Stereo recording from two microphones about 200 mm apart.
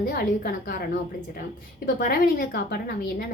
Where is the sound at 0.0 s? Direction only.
45° left (ahead or behind).